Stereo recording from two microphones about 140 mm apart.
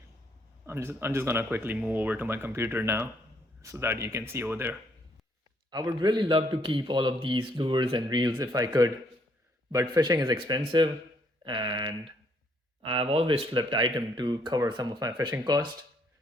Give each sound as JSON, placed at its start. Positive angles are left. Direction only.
{"t": 0.6, "sound": "speech", "side_deg": -15}
{"t": 5.7, "sound": "a man's voice", "side_deg": -30}